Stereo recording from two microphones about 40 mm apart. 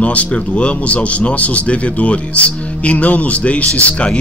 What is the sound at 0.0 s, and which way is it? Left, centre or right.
Speech, left.